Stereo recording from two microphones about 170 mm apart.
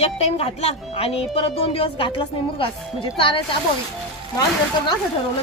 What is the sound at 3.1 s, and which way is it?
Speech, 30° left (ahead or behind).